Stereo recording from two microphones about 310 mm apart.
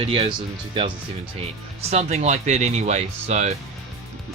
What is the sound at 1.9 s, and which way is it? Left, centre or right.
Speech, right.